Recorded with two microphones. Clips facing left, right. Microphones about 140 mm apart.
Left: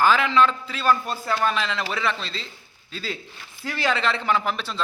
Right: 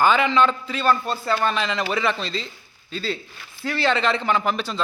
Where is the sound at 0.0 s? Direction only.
Centre (ahead or behind).